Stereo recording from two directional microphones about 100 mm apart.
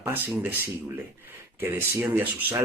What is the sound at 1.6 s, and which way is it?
Speech, 25° right (ahead or behind).